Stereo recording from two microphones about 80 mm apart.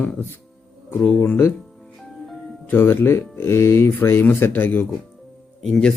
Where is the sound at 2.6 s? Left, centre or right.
Left.